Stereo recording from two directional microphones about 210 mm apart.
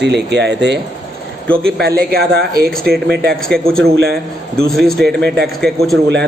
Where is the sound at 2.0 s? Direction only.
50° right (ahead or behind).